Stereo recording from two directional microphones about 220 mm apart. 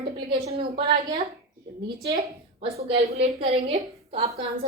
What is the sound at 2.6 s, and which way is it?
A woman's voice, 25° right (ahead or behind).